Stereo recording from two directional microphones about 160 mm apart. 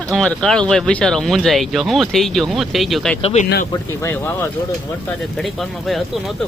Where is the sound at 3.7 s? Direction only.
15° left (ahead or behind).